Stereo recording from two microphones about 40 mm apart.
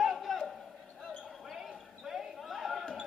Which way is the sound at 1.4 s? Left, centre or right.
Centre.